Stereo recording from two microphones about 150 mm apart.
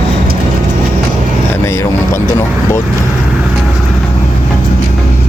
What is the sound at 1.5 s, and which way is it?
Vehicle, 15° left (ahead or behind).